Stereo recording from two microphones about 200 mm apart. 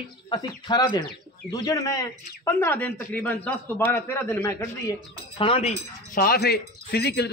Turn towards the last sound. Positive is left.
turn(degrees=55)  # may be behind; listen again after turning